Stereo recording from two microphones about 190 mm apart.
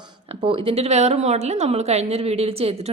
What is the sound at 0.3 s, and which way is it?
A woman's voice, 30° right (ahead or behind).